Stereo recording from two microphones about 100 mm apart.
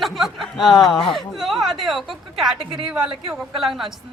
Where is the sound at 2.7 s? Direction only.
50° right (ahead or behind).